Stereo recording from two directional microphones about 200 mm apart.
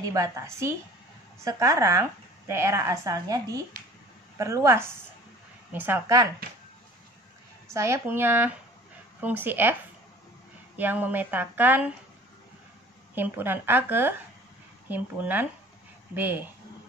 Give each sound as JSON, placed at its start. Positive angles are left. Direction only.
{"t": 0.0, "sound": "speech", "side_deg": -15}
{"t": 7.7, "sound": "speech", "side_deg": -15}
{"t": 10.8, "sound": "speech", "side_deg": -10}
{"t": 13.1, "sound": "speech", "side_deg": -10}